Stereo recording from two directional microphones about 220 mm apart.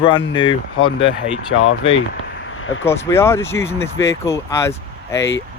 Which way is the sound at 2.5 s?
65° left (ahead or behind).